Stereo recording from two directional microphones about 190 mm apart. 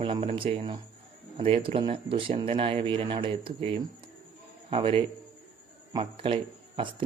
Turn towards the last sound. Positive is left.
turn(degrees=-25)  # may be behind; listen again after turning